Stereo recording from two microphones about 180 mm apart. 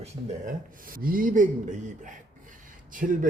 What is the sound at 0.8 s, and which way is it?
Speech, 50° right (ahead or behind).